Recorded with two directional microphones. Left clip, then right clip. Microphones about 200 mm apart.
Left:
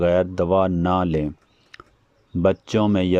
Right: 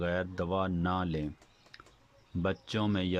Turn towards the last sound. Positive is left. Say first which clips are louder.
# left 13 dB
turn(degrees=35)  # may be behind; listen again after turning